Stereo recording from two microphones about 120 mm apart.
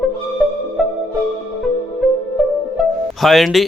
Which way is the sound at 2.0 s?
Centre (ahead or behind).